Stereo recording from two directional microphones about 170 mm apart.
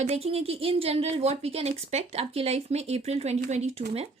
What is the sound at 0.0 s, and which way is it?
Speech, 40° right (ahead or behind).